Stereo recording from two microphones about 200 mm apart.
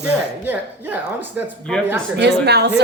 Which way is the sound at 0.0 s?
10° right (ahead or behind).